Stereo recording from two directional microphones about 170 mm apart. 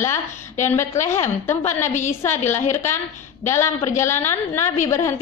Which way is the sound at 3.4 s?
15° left (ahead or behind).